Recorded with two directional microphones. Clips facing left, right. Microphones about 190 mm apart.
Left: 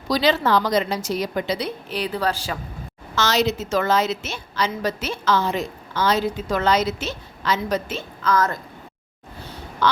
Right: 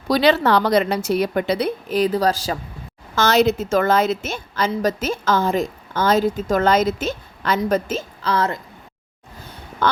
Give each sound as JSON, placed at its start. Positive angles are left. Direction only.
{"t": 0.1, "sound": "a woman's voice", "side_deg": -60}
{"t": 3.2, "sound": "a woman's voice", "side_deg": -55}
{"t": 7.6, "sound": "a woman's voice", "side_deg": -40}
{"t": 9.8, "sound": "quack", "side_deg": -50}